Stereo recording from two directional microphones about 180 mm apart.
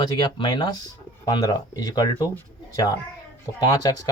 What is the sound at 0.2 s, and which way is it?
Speech, 25° left (ahead or behind).